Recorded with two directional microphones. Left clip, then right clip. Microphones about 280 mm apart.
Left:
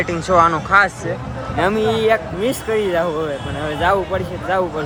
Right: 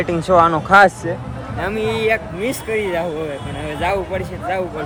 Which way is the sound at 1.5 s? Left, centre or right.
Centre.